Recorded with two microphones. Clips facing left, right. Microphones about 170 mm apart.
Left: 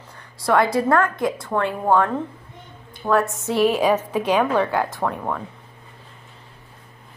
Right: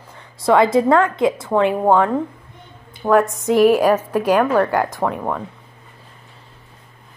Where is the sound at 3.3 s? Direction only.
15° right (ahead or behind).